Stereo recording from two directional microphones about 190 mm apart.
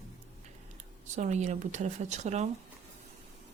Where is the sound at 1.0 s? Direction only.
40° right (ahead or behind).